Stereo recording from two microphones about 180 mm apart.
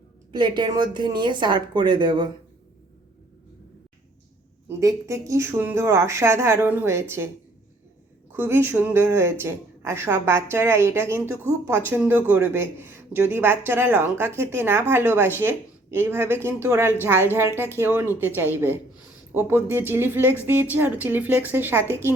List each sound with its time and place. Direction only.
0.3 s a woman's voice: 25° right (ahead or behind)
4.8 s speech: 15° right (ahead or behind)
8.3 s speech: 15° right (ahead or behind)